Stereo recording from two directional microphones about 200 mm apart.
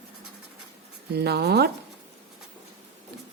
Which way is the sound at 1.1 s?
55° right (ahead or behind).